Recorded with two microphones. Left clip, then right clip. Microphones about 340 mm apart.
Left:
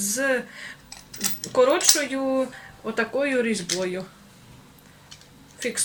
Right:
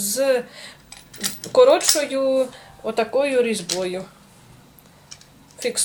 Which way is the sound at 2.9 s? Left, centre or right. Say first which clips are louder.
Right 4 dB; centre.